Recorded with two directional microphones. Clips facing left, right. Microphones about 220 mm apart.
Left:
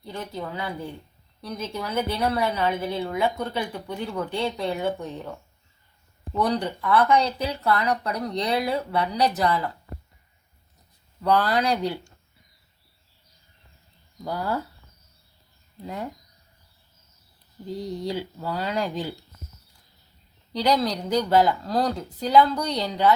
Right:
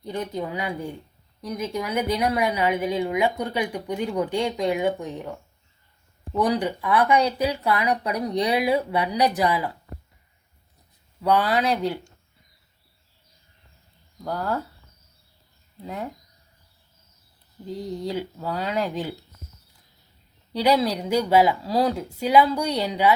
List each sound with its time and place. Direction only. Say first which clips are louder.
0.0 s speech: right 4 dB; 20° right (ahead or behind)
11.2 s speech: right 1 dB; 5° right (ahead or behind)
14.3 s speech: right 1 dB; 5° left (ahead or behind)
15.8 s speech: even; centre (ahead or behind)
17.7 s speech: even; centre (ahead or behind)
20.5 s speech: right 2 dB; 5° right (ahead or behind)